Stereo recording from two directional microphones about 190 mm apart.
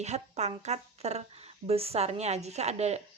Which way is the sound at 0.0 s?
35° right (ahead or behind).